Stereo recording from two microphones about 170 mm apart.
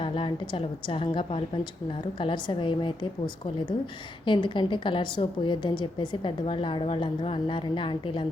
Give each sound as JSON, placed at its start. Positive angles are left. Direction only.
{"t": 0.0, "sound": "a woman's voice", "side_deg": 30}